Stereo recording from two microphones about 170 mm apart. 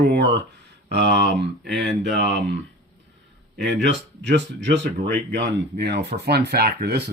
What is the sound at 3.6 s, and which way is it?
Speech, 90° right.